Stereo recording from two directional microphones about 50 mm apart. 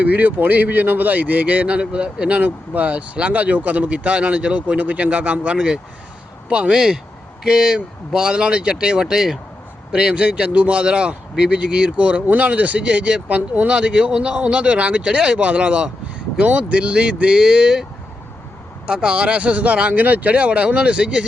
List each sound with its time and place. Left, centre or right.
0.0 s speech: right; by 17.8 s centre
18.9 s speech: centre